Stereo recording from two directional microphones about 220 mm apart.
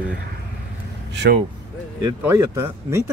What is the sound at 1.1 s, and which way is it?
Vehicle, 50° right (ahead or behind).